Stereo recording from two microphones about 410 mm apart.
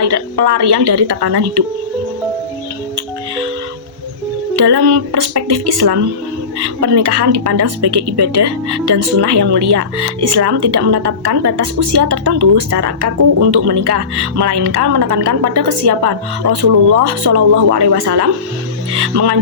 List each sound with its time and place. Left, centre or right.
0.0 s speech: right
4.5 s speech: right